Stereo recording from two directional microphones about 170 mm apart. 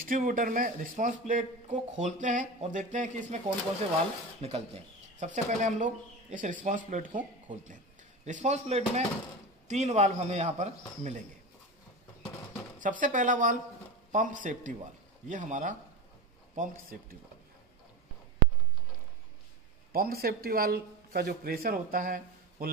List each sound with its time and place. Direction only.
0.1 s speech: 55° right (ahead or behind)
4.4 s speech: 35° right (ahead or behind)
12.8 s speech: 50° right (ahead or behind)
19.9 s speech: 60° right (ahead or behind)